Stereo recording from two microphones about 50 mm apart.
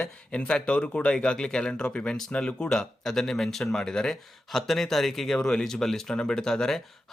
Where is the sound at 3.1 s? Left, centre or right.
Centre.